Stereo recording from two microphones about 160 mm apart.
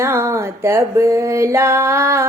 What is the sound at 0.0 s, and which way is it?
Music, 15° right (ahead or behind).